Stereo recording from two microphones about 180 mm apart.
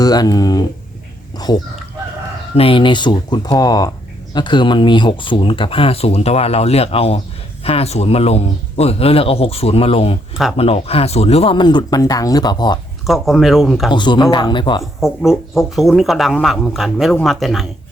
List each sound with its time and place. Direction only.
0.0 s speech: 20° left (ahead or behind)
2.6 s speech: 30° left (ahead or behind)
13.1 s speech: centre (ahead or behind)
13.9 s speech: 25° left (ahead or behind)
14.8 s speech: centre (ahead or behind)